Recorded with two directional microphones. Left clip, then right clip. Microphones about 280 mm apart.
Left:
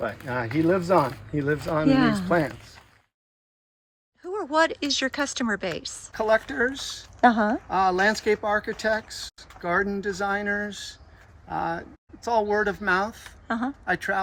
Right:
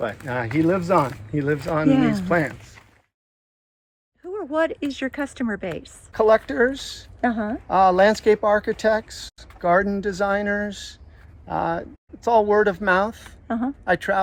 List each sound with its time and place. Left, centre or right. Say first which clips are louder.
0.0 s speech: right 3 dB; centre
4.3 s speech: even; centre
6.1 s speech: right 6 dB; right
7.0 s speech: left 5 dB; centre
7.7 s speech: right 8 dB; right
13.5 s speech: right 2 dB; centre
13.8 s speech: right 6 dB; centre